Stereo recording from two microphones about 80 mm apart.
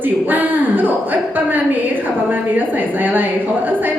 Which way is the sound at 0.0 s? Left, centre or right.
Right.